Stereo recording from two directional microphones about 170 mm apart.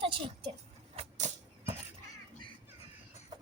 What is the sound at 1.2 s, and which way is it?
Music, 45° right (ahead or behind).